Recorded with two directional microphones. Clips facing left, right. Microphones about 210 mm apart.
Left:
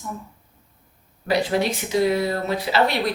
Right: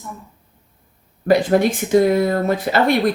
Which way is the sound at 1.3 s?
50° right (ahead or behind).